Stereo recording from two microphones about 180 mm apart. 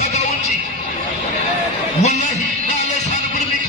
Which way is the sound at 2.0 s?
40° left (ahead or behind).